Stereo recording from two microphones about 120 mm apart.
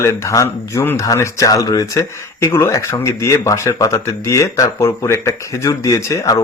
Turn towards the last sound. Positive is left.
turn(degrees=30)  # may be behind; listen again after turning